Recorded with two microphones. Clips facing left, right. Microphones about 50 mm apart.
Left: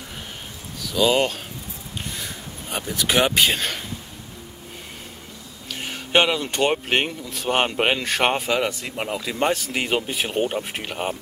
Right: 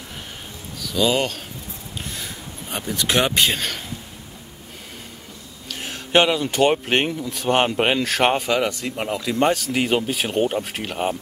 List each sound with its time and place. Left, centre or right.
0.7 s speech: centre
2.0 s a sound: centre
5.7 s speech: centre